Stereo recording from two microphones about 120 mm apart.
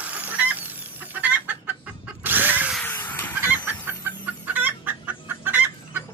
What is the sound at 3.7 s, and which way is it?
Chicken, 15° right (ahead or behind).